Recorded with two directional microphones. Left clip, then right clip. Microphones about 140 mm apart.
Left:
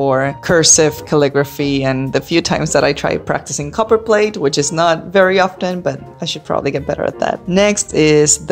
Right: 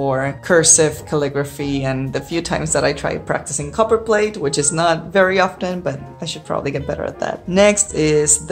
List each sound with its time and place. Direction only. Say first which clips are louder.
0.0 s a woman's voice: left 5 dB; 40° left (ahead or behind)